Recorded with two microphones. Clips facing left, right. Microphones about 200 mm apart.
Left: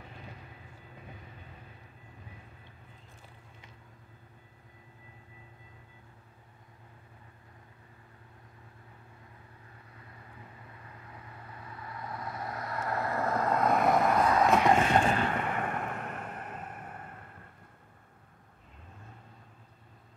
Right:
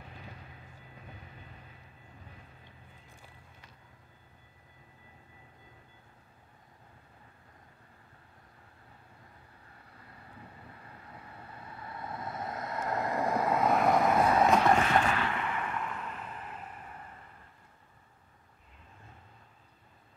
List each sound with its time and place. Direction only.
12.0 s vehicle: 25° right (ahead or behind); by 14.6 s centre (ahead or behind)
14.6 s boat: 20° left (ahead or behind)
15.1 s a sound: 45° left (ahead or behind)